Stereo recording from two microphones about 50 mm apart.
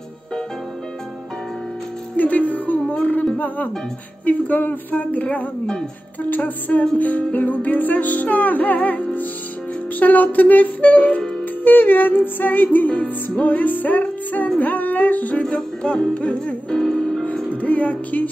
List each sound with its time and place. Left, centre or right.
2.1 s music: left
11.4 s music: left
15.4 s music: centre
17.5 s music: left